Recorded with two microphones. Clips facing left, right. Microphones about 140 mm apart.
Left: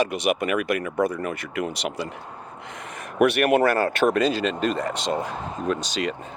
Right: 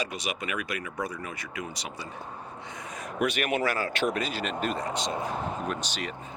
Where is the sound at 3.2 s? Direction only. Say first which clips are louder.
Left 9 dB; 65° left (ahead or behind).